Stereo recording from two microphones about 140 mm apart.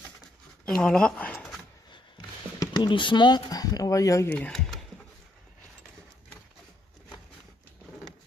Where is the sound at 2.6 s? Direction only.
30° left (ahead or behind).